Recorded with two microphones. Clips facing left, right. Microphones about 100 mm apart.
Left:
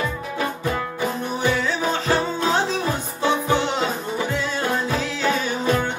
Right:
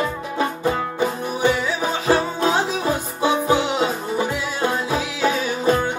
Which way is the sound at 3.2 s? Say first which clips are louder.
Right 1 dB; 10° right (ahead or behind).